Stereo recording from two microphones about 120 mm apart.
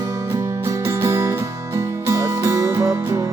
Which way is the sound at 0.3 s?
20° right (ahead or behind).